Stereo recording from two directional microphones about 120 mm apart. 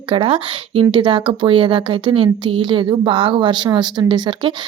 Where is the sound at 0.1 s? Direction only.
50° right (ahead or behind).